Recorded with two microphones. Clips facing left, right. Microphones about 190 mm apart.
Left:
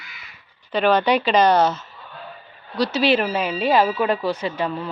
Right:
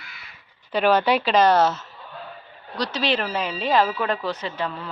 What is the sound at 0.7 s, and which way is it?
Speech, 10° right (ahead or behind).